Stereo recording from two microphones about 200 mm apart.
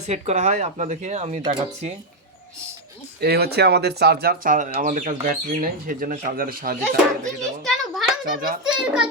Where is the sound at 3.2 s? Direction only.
50° right (ahead or behind).